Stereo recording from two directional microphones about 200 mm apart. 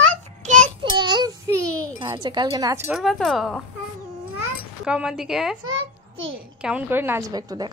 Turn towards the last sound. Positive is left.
turn(degrees=-20)  # may be behind; listen again after turning